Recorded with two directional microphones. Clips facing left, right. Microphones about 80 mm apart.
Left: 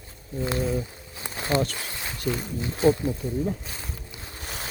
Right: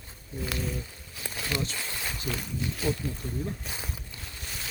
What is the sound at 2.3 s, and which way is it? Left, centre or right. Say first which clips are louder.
Speech: left 8 dB; left.